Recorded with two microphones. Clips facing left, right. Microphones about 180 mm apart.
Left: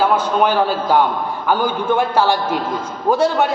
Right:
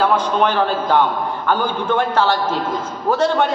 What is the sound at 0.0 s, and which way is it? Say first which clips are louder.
A man's voice: left 1 dB; 10° left (ahead or behind).